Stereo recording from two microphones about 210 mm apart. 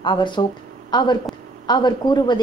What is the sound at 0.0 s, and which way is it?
A woman's voice, 20° left (ahead or behind).